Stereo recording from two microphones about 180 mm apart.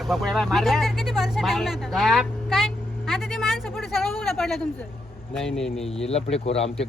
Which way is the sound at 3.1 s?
Centre (ahead or behind).